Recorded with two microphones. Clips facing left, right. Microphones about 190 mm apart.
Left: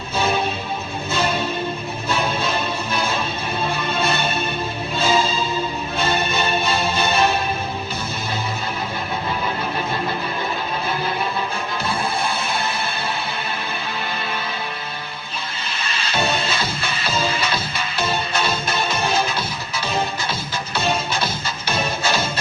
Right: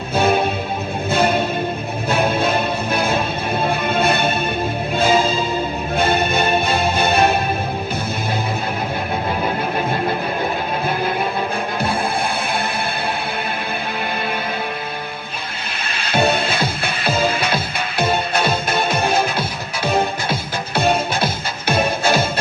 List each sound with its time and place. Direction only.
0.2 s music: 55° right (ahead or behind)
15.8 s music: 55° right (ahead or behind)